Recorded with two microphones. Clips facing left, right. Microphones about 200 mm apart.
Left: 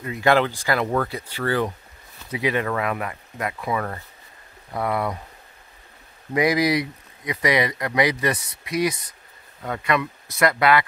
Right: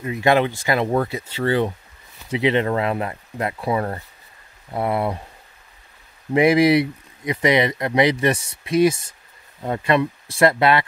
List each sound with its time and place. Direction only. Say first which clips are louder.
0.0 s speech: right 2 dB; 20° right (ahead or behind)
6.3 s speech: right 5 dB; 25° right (ahead or behind)